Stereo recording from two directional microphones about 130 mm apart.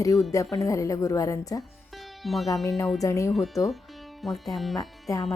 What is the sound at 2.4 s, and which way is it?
Speech, 25° left (ahead or behind).